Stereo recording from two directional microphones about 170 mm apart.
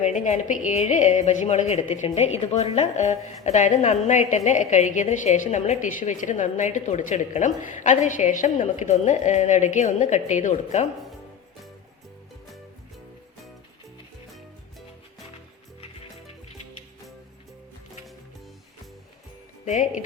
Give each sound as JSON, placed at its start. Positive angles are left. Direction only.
{"t": 0.0, "sound": "a woman's voice", "side_deg": 45}
{"t": 19.6, "sound": "a woman's voice", "side_deg": 50}